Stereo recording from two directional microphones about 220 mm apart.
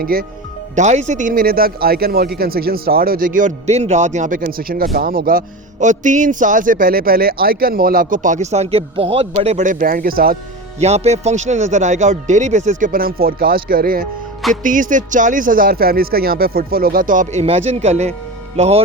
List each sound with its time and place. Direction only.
0.0 s speech: 40° right (ahead or behind)
0.8 s a man's voice: 30° right (ahead or behind)
10.8 s a man's voice: 30° right (ahead or behind)